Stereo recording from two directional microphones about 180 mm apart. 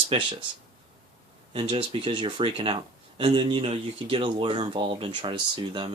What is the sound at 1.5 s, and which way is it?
Speech, 25° right (ahead or behind).